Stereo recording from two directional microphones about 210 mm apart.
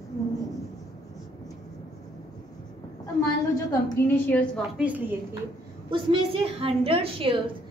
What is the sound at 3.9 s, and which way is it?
A woman's voice, 5° left (ahead or behind).